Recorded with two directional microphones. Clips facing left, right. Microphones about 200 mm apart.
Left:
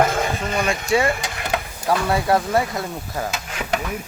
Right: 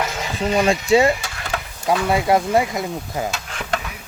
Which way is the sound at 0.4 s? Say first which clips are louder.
Right 5 dB; 30° right (ahead or behind).